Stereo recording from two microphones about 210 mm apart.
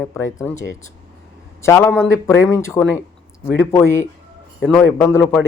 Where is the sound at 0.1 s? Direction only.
15° left (ahead or behind).